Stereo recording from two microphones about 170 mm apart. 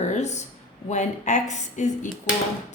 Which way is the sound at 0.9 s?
45° left (ahead or behind).